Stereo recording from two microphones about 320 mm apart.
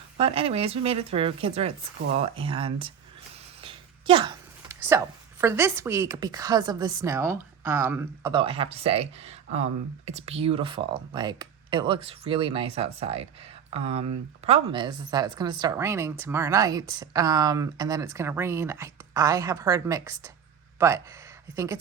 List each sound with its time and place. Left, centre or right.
0.2 s speech: centre